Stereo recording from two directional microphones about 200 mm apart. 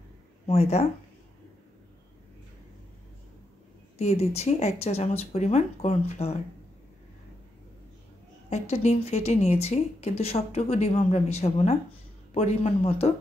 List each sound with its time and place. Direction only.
0.5 s speech: 35° left (ahead or behind)
4.0 s speech: 30° left (ahead or behind)
8.5 s speech: 35° left (ahead or behind)